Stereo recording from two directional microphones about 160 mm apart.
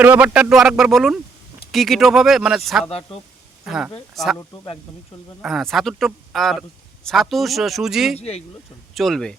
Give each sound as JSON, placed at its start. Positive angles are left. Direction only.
{"t": 0.0, "sound": "a man's voice", "side_deg": -10}
{"t": 4.1, "sound": "a man's voice", "side_deg": 0}
{"t": 5.4, "sound": "a man's voice", "side_deg": 0}
{"t": 8.1, "sound": "speech", "side_deg": 40}
{"t": 9.0, "sound": "a man's voice", "side_deg": 0}